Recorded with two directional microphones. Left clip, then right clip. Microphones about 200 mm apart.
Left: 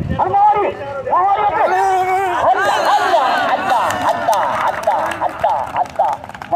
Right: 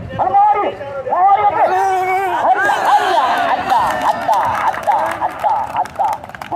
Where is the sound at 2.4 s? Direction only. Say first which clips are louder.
Right 1 dB; 50° left (ahead or behind).